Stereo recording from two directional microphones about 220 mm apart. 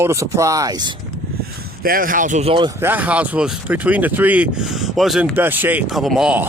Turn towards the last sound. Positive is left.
turn(degrees=-5)  # may be behind; listen again after turning